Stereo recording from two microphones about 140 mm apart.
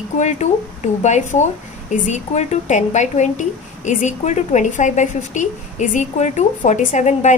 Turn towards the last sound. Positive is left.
turn(degrees=60)  # may be behind; listen again after turning